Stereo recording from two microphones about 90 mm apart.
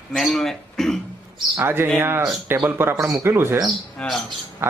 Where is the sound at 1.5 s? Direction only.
25° right (ahead or behind).